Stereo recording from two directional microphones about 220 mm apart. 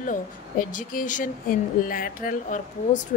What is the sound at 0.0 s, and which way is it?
Speech, 35° left (ahead or behind).